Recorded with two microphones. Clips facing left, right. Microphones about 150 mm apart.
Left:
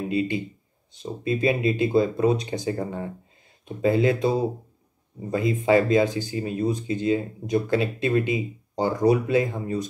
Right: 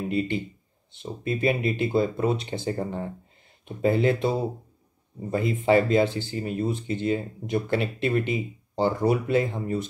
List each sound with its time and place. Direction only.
0.1 s speech: 15° left (ahead or behind)